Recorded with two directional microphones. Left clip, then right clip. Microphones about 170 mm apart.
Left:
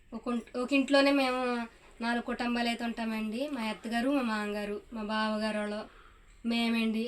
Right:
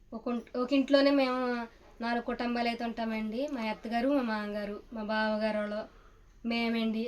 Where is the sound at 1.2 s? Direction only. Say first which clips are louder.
Even; 20° right (ahead or behind).